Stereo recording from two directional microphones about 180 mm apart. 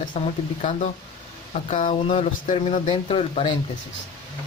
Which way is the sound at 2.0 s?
30° left (ahead or behind).